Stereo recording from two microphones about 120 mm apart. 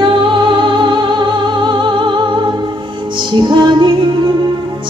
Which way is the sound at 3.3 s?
40° right (ahead or behind).